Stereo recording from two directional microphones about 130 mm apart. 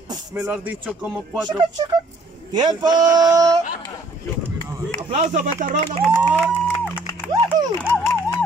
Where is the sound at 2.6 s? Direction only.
30° right (ahead or behind).